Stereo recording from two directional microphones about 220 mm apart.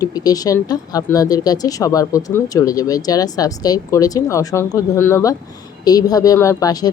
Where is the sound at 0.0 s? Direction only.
15° left (ahead or behind).